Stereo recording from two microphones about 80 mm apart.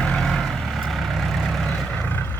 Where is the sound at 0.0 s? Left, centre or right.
Centre.